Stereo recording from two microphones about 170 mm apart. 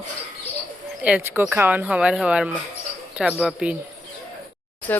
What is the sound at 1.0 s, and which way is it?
Speech, 5° right (ahead or behind).